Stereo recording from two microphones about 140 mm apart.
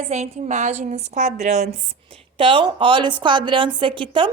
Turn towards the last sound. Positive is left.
turn(degrees=-40)  # may be behind; listen again after turning